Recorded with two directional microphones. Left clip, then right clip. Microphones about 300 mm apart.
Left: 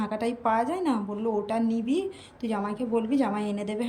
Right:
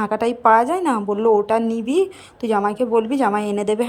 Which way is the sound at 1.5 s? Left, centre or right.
Centre.